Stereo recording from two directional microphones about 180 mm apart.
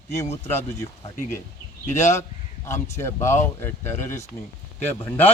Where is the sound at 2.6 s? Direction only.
15° left (ahead or behind).